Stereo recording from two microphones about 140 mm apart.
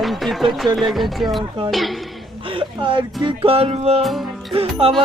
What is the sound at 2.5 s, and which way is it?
Speech, 35° right (ahead or behind).